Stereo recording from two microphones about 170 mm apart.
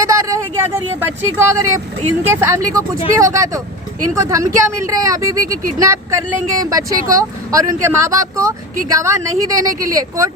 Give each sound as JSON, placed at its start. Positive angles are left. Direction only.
{"t": 0.0, "sound": "vehicle", "side_deg": -20}
{"t": 2.2, "sound": "speech", "side_deg": -15}